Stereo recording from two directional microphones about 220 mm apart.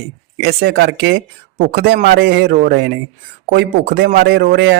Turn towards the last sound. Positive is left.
turn(degrees=-50)  # may be behind; listen again after turning